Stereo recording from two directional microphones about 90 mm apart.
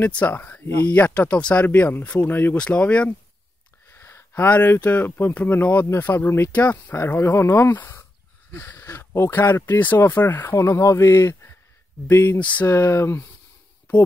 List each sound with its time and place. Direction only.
0.0 s speech: 20° left (ahead or behind)
3.9 s speech: 25° left (ahead or behind)
12.7 s speech: 30° left (ahead or behind)